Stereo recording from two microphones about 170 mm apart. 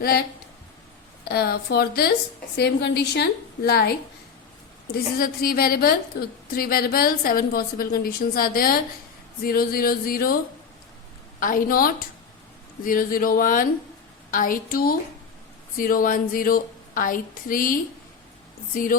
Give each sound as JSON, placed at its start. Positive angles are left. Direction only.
{"t": 1.2, "sound": "speech", "side_deg": 65}
{"t": 5.1, "sound": "a woman's voice", "side_deg": 60}
{"t": 11.3, "sound": "a woman's voice", "side_deg": 55}